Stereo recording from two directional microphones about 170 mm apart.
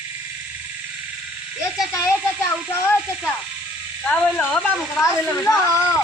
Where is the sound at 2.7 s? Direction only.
15° left (ahead or behind).